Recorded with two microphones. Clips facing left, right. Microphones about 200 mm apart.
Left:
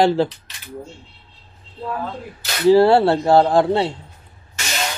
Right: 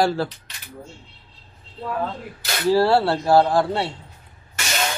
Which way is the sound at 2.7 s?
20° left (ahead or behind).